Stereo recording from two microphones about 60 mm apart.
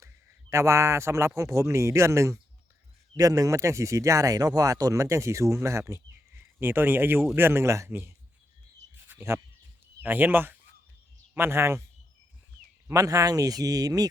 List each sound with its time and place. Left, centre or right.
0.5 s speech: right
1.3 s speech: right
3.2 s speech: right
6.3 s speech: right
10.0 s speech: right
11.3 s speech: right
12.9 s speech: right